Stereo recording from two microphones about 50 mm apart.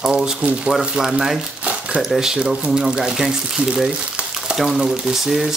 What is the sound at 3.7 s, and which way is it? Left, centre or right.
Frying, centre.